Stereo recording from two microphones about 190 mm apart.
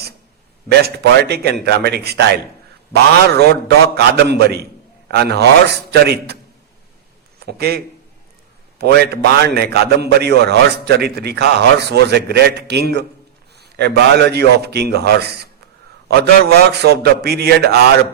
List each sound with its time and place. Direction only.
0.7 s a man's voice: 60° right (ahead or behind)
7.3 s a man's voice: 55° right (ahead or behind)
8.8 s a man's voice: 60° right (ahead or behind)